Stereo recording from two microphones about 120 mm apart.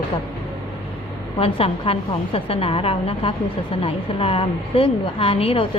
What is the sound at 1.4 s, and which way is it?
A woman's voice, 50° left (ahead or behind).